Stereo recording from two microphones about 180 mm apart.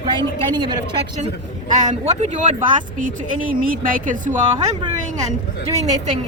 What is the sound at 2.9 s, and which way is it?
Speech, 50° right (ahead or behind).